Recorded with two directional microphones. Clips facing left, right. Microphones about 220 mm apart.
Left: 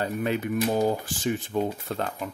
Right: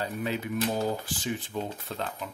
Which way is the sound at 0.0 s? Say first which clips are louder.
Left 5 dB; 55° left (ahead or behind).